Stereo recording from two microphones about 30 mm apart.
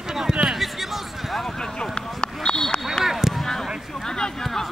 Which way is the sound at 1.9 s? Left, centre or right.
Left.